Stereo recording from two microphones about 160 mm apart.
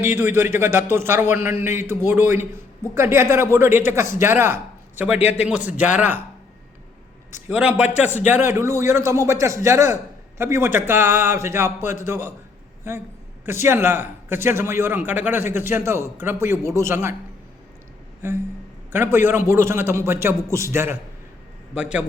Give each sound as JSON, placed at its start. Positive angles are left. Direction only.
{"t": 0.0, "sound": "a man's voice", "side_deg": -15}
{"t": 7.4, "sound": "a man's voice", "side_deg": -5}
{"t": 8.0, "sound": "speech", "side_deg": 50}
{"t": 8.3, "sound": "a man's voice", "side_deg": -15}
{"t": 13.4, "sound": "a man's voice", "side_deg": -15}
{"t": 18.2, "sound": "a man's voice", "side_deg": -15}